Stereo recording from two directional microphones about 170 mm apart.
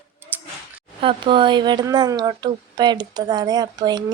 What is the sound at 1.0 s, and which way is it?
Speech, 30° right (ahead or behind).